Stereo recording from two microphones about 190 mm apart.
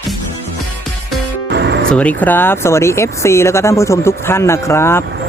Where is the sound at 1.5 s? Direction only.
65° right (ahead or behind).